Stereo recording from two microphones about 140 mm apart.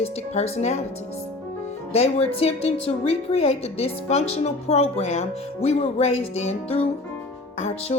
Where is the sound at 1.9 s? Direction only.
45° left (ahead or behind).